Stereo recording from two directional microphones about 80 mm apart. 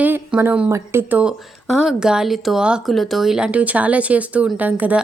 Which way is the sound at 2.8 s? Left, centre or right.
Centre.